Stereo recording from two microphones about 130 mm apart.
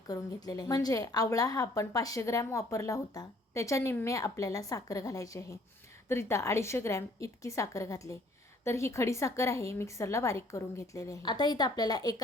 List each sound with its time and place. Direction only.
0.1 s a woman's voice: 30° left (ahead or behind)